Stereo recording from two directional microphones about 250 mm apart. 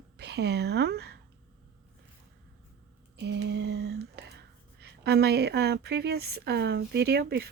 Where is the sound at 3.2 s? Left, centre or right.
Right.